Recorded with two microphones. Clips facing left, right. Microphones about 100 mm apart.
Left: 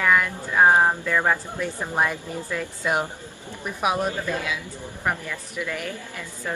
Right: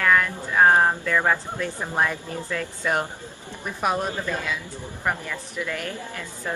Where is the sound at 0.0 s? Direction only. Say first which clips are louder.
Even; 10° left (ahead or behind).